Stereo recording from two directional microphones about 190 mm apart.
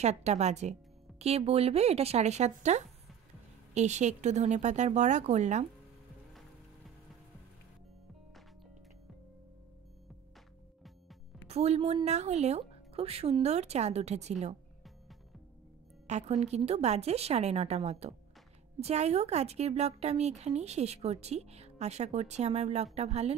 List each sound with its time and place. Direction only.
0.0 s a woman's voice: 35° right (ahead or behind)
11.4 s a woman's voice: 35° right (ahead or behind)
16.1 s a woman's voice: 35° right (ahead or behind)